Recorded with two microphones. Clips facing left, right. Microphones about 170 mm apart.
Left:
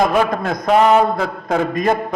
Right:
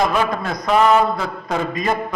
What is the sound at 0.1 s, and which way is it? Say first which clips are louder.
A man's voice: left 3 dB; 50° left (ahead or behind).